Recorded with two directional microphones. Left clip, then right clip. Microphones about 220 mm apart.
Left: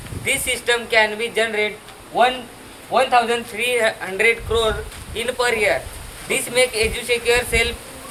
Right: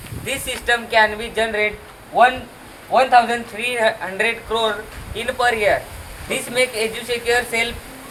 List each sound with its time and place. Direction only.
0.3 s speech: 15° left (ahead or behind)
2.9 s speech: 10° left (ahead or behind)